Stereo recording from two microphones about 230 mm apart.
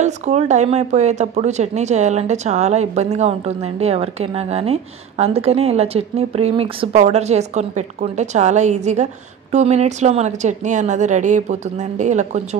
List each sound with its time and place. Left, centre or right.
0.0 s a woman's voice: right